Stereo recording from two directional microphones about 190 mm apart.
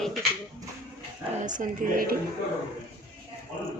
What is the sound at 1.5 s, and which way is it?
Speech, 45° right (ahead or behind).